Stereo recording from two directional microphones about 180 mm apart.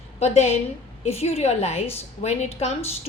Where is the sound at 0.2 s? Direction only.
35° left (ahead or behind).